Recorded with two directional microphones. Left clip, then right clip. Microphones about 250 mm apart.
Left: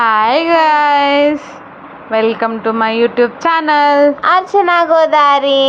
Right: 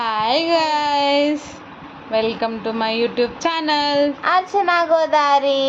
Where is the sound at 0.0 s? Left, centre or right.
Centre.